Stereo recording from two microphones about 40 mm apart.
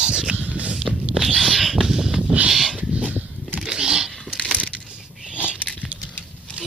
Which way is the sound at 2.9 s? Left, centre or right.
Right.